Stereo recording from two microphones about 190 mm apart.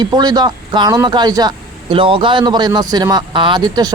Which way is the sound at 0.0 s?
20° right (ahead or behind).